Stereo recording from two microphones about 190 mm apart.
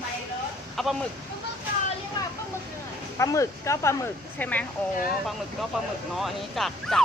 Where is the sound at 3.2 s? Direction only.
15° left (ahead or behind).